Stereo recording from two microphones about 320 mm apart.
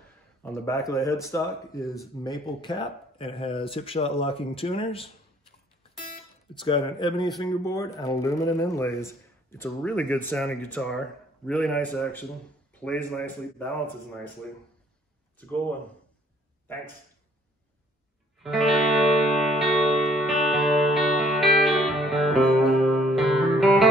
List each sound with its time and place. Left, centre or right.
0.4 s speech: centre
6.5 s a man's voice: centre
18.4 s music: centre